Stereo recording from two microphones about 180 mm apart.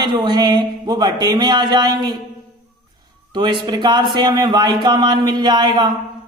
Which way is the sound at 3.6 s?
25° right (ahead or behind).